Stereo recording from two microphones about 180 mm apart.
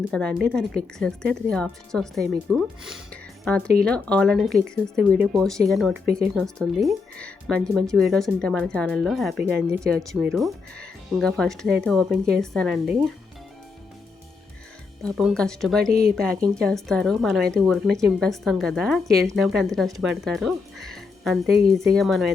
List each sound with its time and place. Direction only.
0.1 s speech: 5° left (ahead or behind)
15.0 s speech: 5° left (ahead or behind)
15.9 s speech: 55° right (ahead or behind)
16.1 s speech: 5° left (ahead or behind)